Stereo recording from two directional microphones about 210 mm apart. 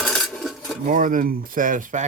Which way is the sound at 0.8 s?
40° right (ahead or behind).